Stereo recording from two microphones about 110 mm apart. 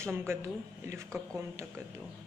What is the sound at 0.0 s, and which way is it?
Speech, 25° right (ahead or behind).